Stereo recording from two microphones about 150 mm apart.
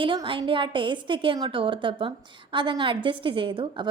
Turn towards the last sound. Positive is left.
turn(degrees=-35)  # may be behind; listen again after turning